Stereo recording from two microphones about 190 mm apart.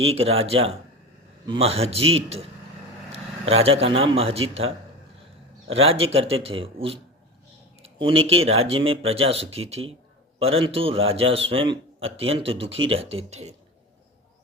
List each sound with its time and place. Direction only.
0.0 s a man's voice: 30° right (ahead or behind)